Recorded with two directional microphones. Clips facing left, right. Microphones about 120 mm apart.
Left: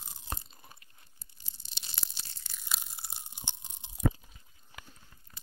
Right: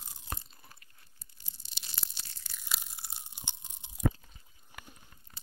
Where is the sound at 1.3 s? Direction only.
25° left (ahead or behind).